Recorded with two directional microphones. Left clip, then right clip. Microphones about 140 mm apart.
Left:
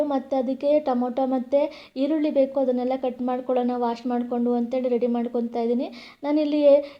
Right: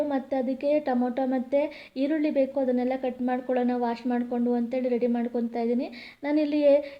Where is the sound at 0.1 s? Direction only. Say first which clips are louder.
Left 3 dB; 25° left (ahead or behind).